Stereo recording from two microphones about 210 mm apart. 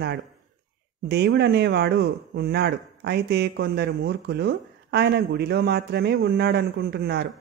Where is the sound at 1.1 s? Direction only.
50° right (ahead or behind).